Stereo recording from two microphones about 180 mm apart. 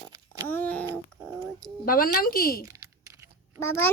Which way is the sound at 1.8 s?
55° left (ahead or behind).